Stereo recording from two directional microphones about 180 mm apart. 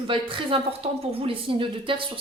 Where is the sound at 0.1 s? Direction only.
30° right (ahead or behind).